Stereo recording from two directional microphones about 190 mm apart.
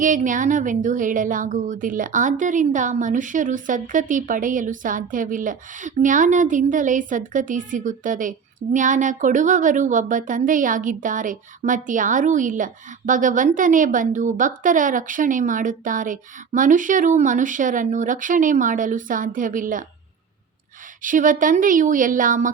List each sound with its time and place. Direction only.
0.0 s speech: 45° right (ahead or behind)
21.0 s speech: 45° right (ahead or behind)